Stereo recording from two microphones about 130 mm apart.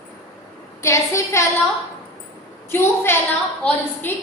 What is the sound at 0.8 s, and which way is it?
Speech, 20° left (ahead or behind).